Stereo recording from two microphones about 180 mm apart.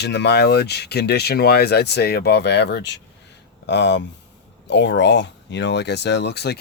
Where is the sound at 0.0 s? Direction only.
70° left (ahead or behind).